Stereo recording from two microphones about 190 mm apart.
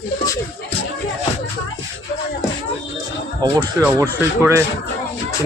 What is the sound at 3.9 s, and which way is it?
Speech, 15° right (ahead or behind).